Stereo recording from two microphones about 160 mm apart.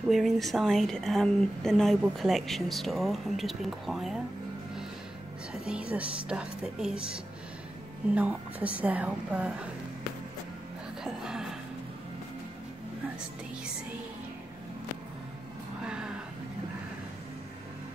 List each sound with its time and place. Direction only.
0.1 s a woman's voice: centre (ahead or behind)
5.5 s a woman's voice: 5° right (ahead or behind)
11.1 s music: 5° right (ahead or behind)
15.8 s vehicle: 5° right (ahead or behind)